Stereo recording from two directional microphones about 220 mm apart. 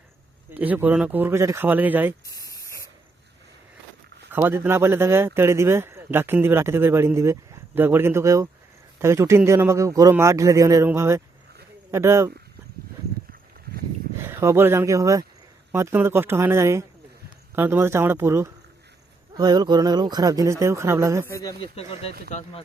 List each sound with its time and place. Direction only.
0.5 s speech: 5° right (ahead or behind)
2.5 s spray: 15° left (ahead or behind)
4.3 s speech: 10° right (ahead or behind)
14.3 s speech: 10° right (ahead or behind)
21.2 s speech: 15° left (ahead or behind); by 22.6 s 30° left (ahead or behind)